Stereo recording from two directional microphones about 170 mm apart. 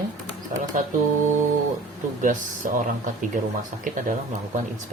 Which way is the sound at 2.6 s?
50° right (ahead or behind).